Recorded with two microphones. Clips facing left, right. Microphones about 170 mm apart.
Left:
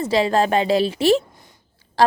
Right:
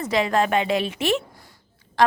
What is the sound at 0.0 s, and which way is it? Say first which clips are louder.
A woman's voice: left 3 dB; 30° left (ahead or behind).